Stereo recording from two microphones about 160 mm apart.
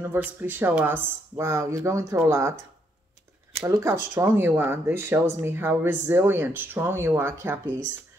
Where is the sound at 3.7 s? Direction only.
15° right (ahead or behind).